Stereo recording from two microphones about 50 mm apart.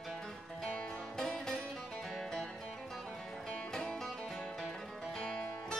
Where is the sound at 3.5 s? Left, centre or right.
Centre.